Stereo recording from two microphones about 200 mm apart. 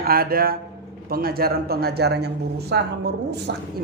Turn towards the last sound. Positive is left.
turn(degrees=-55)  # may be behind; listen again after turning